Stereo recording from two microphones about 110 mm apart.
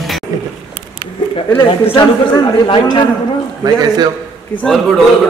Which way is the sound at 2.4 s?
45° left (ahead or behind).